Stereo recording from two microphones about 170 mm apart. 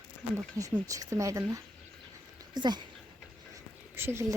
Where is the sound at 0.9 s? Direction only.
20° right (ahead or behind).